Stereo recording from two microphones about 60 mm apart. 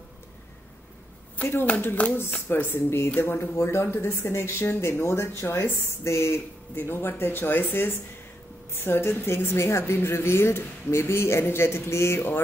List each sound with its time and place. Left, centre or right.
1.4 s speech: left
2.0 s speech: left
2.4 s speech: left